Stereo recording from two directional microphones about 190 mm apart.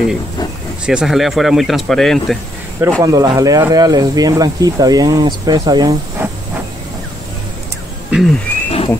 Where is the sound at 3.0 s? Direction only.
20° right (ahead or behind).